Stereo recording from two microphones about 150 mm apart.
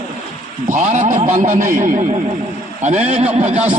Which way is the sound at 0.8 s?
55° right (ahead or behind).